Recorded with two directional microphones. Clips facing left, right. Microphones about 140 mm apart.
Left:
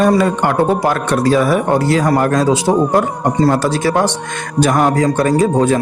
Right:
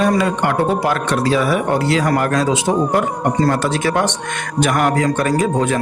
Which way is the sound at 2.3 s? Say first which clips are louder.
Left 3 dB; 40° left (ahead or behind).